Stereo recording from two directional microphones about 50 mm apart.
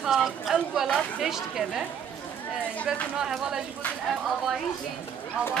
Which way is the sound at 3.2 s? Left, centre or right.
Centre.